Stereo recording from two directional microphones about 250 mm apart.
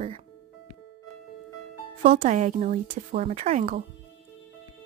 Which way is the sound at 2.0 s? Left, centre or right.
Right.